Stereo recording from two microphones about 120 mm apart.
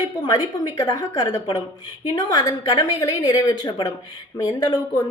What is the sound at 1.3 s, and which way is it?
Speech, 45° left (ahead or behind).